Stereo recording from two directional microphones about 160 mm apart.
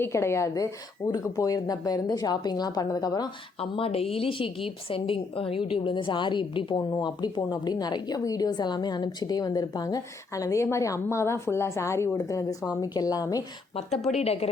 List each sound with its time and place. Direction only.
0.0 s a woman's voice: 15° left (ahead or behind)
3.6 s a woman's voice: 35° left (ahead or behind)
14.2 s a woman's voice: 40° left (ahead or behind)